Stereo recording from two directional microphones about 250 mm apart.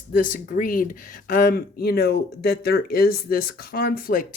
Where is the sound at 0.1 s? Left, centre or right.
Left.